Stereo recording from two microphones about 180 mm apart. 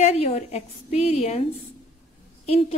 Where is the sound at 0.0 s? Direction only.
35° left (ahead or behind).